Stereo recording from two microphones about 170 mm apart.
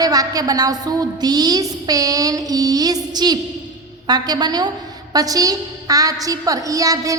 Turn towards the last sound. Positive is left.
turn(degrees=-20)  # may be behind; listen again after turning